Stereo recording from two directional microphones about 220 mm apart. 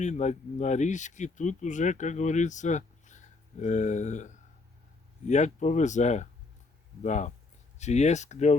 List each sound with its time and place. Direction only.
0.0 s speech: 30° left (ahead or behind)